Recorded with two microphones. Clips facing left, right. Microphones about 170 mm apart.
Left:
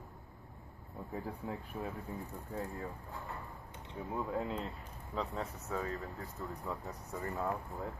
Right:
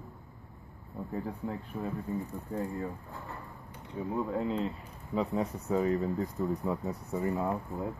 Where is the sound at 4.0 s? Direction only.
5° right (ahead or behind).